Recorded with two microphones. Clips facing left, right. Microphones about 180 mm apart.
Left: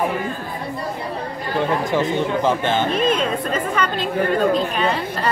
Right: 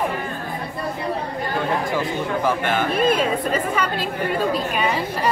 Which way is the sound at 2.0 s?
25° left (ahead or behind).